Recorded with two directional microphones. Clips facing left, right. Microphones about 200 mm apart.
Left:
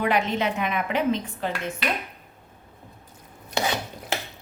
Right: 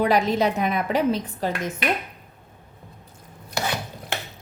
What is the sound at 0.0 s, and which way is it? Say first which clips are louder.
A woman's voice: right 4 dB; 35° right (ahead or behind).